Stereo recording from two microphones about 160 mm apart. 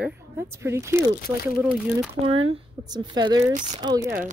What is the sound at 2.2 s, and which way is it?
Speech, 35° right (ahead or behind).